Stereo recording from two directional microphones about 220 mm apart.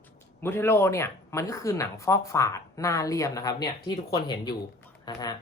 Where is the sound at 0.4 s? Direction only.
10° left (ahead or behind).